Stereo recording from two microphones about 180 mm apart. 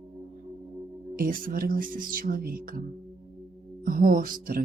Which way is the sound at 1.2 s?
50° right (ahead or behind).